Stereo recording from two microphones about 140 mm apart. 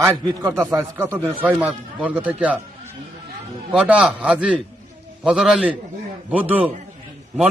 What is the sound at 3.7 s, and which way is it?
A man's voice, 5° right (ahead or behind).